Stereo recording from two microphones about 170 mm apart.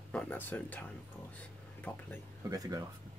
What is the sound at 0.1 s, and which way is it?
Speech, 10° left (ahead or behind).